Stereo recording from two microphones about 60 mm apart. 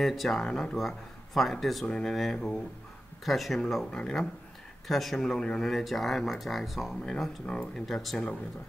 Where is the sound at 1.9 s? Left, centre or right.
Centre.